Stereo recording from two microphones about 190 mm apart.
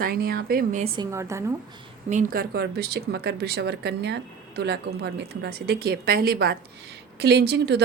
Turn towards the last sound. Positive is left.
turn(degrees=-60)  # may be behind; listen again after turning